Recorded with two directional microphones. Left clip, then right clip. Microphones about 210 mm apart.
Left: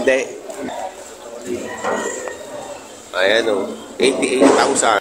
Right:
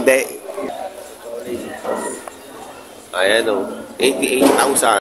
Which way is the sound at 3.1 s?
15° right (ahead or behind).